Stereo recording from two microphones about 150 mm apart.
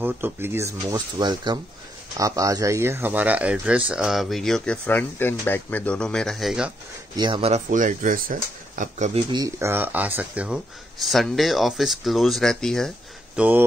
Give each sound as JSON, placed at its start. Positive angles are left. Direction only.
{"t": 0.0, "sound": "speech", "side_deg": -15}
{"t": 7.2, "sound": "speech", "side_deg": -35}
{"t": 7.5, "sound": "speech", "side_deg": -60}
{"t": 9.3, "sound": "speech", "side_deg": -20}
{"t": 13.4, "sound": "speech", "side_deg": -10}